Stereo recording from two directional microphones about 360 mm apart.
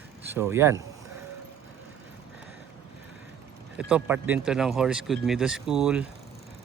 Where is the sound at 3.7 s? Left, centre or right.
Centre.